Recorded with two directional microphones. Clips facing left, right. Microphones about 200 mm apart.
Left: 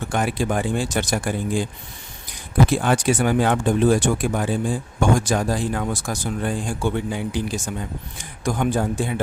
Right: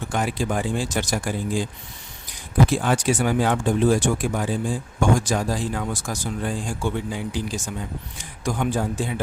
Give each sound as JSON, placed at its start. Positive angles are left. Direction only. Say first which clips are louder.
{"t": 0.1, "sound": "speech", "louder": "left 2 dB", "side_deg": 60}
{"t": 2.6, "sound": "speech", "louder": "left 2 dB", "side_deg": 60}